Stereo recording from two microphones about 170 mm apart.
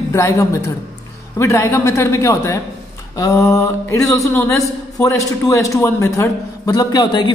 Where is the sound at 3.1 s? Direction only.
20° left (ahead or behind).